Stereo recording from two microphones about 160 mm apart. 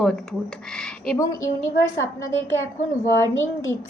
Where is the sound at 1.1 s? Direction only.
20° left (ahead or behind).